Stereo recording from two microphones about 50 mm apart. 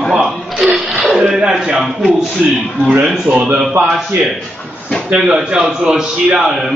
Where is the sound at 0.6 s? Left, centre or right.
Centre.